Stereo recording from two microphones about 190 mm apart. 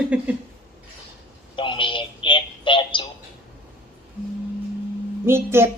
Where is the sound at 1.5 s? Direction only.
25° left (ahead or behind).